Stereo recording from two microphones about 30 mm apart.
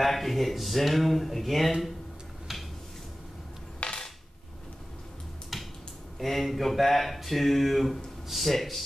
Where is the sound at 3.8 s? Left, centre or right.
Left.